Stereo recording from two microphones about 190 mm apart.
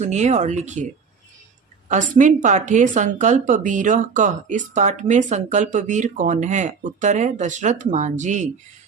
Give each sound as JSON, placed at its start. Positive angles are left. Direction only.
{"t": 0.0, "sound": "speech", "side_deg": -35}
{"t": 1.9, "sound": "speech", "side_deg": -40}